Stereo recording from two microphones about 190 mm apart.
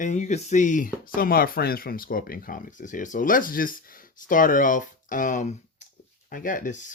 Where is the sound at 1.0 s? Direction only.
50° left (ahead or behind).